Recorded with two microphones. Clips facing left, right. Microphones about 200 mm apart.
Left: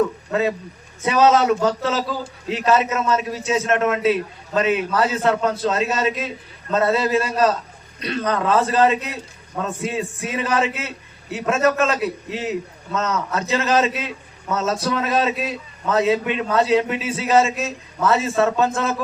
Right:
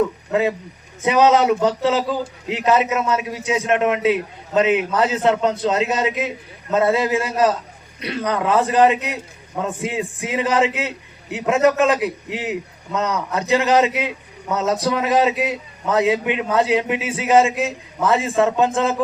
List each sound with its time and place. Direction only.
0.3 s a man's voice: 15° right (ahead or behind)